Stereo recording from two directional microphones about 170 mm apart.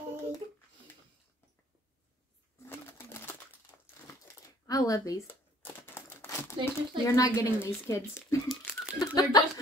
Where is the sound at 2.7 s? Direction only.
15° left (ahead or behind).